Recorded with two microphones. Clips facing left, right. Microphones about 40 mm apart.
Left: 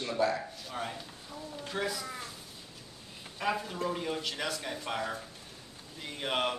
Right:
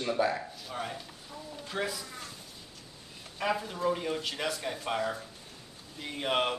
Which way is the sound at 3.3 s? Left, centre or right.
Centre.